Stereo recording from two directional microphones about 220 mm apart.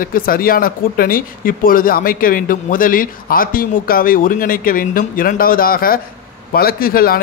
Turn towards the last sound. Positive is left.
turn(degrees=40)  # may be behind; listen again after turning